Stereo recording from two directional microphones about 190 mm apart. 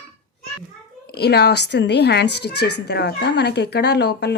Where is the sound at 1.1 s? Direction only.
60° left (ahead or behind).